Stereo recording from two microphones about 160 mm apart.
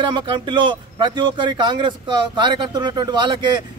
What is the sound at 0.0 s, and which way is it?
Speech, 30° right (ahead or behind).